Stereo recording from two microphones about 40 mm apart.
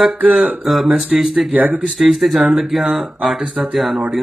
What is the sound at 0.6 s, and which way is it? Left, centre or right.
A man's voice, centre.